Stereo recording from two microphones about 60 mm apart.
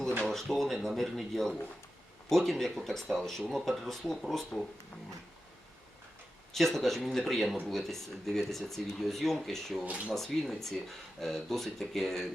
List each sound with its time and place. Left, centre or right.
0.3 s speech: centre
6.5 s speech: centre
9.8 s speech: right
10.2 s speech: centre